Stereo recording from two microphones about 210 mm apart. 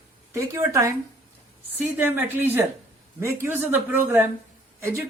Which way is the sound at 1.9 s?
10° right (ahead or behind).